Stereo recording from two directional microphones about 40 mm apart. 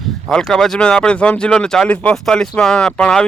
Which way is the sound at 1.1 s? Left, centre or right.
Left.